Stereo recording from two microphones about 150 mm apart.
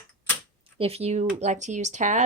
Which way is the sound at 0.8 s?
40° right (ahead or behind).